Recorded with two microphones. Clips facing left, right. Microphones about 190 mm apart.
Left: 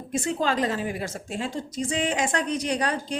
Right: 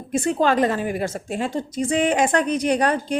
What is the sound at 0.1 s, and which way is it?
Speech, 60° right (ahead or behind).